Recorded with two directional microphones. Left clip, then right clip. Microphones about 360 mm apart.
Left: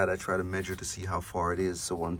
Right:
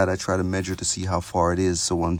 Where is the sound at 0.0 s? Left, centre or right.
Centre.